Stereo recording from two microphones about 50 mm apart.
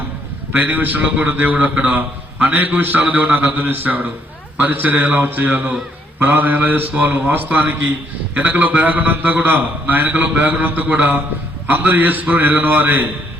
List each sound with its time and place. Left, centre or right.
0.5 s a man's voice: right